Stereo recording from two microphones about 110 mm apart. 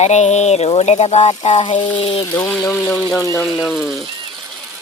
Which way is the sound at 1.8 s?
50° left (ahead or behind).